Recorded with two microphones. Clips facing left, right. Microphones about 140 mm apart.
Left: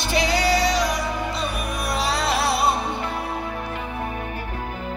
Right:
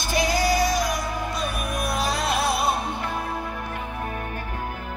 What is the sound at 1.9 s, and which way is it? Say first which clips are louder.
Music: left 3 dB; 70° left (ahead or behind).